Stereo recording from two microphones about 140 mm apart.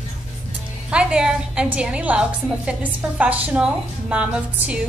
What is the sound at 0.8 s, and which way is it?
A woman's voice, 5° right (ahead or behind).